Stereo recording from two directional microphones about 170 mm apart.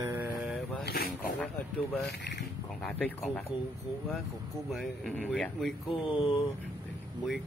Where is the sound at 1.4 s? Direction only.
5° left (ahead or behind).